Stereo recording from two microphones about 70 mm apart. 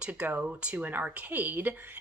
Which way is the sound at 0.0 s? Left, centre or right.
Right.